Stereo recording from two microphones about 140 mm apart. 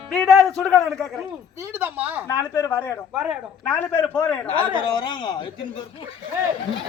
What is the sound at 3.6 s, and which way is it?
Speech, 10° left (ahead or behind).